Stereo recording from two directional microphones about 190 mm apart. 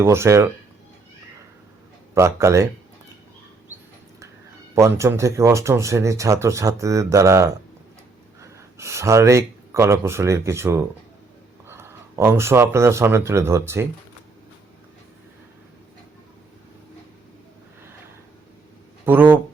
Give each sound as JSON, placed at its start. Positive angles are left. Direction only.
{"t": 0.0, "sound": "speech", "side_deg": -15}
{"t": 2.1, "sound": "speech", "side_deg": -15}
{"t": 4.7, "sound": "speech", "side_deg": -15}
{"t": 19.0, "sound": "speech", "side_deg": -10}